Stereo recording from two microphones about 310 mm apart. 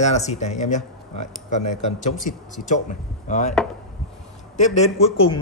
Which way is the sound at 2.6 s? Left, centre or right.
Left.